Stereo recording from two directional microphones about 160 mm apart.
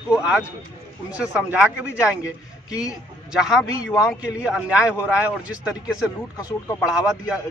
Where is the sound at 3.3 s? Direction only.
5° right (ahead or behind).